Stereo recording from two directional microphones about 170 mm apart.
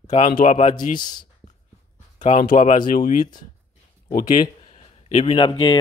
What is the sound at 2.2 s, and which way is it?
Speech, 50° left (ahead or behind).